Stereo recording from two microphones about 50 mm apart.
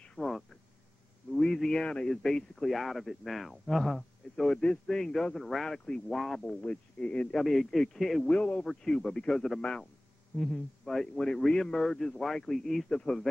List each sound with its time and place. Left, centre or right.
0.2 s a sound: left
1.3 s a sound: centre
2.2 s a man's voice: centre
5.7 s speech: centre
6.0 s speech: centre
6.6 s speech: left
7.3 s a man's voice: centre
8.3 s speech: left
8.5 s speech: centre
9.6 s a man's voice: centre